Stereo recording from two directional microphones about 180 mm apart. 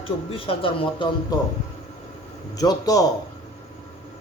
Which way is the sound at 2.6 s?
20° left (ahead or behind).